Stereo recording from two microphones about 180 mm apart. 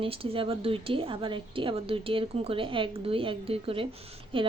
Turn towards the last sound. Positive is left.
turn(degrees=-35)  # may be behind; listen again after turning